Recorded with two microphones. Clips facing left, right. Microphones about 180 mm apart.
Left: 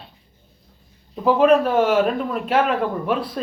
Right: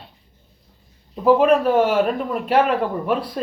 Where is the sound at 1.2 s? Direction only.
10° right (ahead or behind).